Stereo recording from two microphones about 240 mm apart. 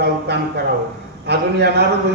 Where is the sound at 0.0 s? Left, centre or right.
Right.